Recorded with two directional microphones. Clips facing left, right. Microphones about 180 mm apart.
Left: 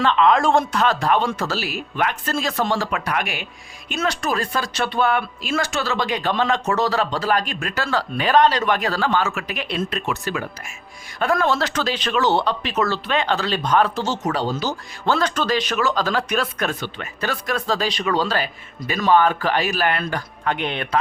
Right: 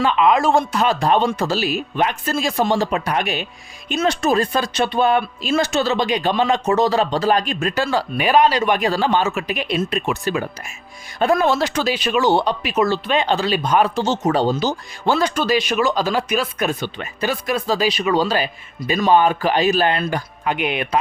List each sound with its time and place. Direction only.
0.0 s speech: 10° right (ahead or behind)